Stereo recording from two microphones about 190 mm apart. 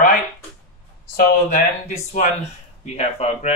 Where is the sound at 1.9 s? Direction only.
40° left (ahead or behind).